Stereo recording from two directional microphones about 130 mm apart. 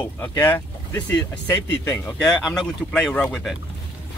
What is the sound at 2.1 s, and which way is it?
Speech, 5° left (ahead or behind).